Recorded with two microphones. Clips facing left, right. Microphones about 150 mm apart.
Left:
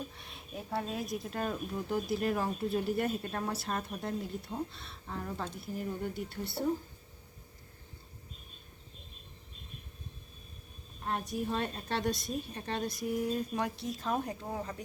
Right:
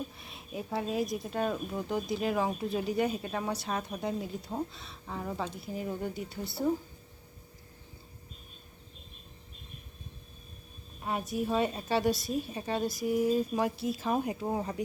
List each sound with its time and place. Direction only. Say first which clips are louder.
0.2 s speech: right 4 dB; centre (ahead or behind)
11.0 s speech: right 2 dB; 5° right (ahead or behind)
14.4 s speech: right 6 dB; 20° right (ahead or behind)